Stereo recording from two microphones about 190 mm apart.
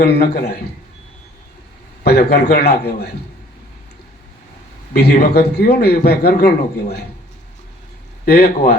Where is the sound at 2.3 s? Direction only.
55° left (ahead or behind).